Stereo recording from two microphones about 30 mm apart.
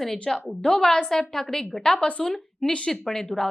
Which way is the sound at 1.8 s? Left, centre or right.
Left.